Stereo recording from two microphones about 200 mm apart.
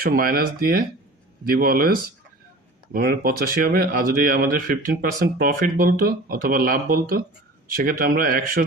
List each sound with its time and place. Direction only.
0.0 s speech: 45° right (ahead or behind)